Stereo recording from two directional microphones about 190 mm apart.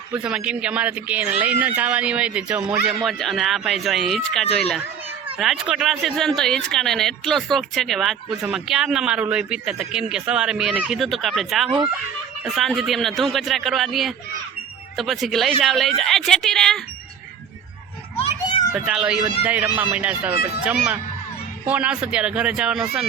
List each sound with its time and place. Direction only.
0.1 s speech: 5° right (ahead or behind)
18.2 s children playing: 25° left (ahead or behind)
18.7 s speech: 5° right (ahead or behind)
21.7 s speech: 5° right (ahead or behind)